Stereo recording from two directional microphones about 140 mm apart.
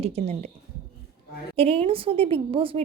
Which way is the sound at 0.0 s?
50° right (ahead or behind).